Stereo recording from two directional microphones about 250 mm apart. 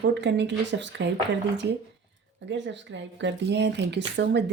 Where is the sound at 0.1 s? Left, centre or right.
Right.